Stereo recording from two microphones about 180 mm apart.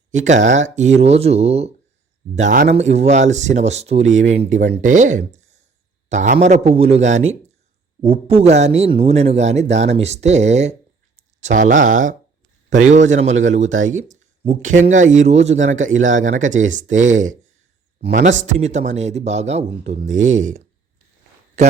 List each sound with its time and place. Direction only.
0.1 s a man's voice: 40° right (ahead or behind)